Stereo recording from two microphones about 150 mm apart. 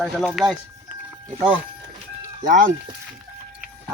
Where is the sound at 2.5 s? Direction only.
65° right (ahead or behind).